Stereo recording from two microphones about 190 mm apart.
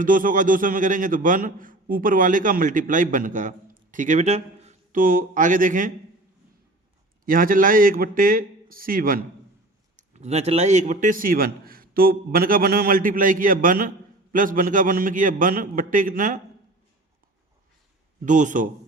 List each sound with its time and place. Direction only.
0.0 s a man's voice: 45° right (ahead or behind)
7.3 s a man's voice: 45° right (ahead or behind)
10.0 s a man's voice: 35° right (ahead or behind)
18.3 s speech: 40° right (ahead or behind)